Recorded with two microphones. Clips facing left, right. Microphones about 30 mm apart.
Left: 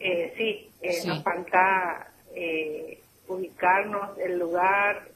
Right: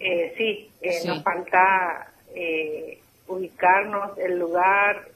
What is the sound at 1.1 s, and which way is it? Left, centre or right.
A woman's voice, centre.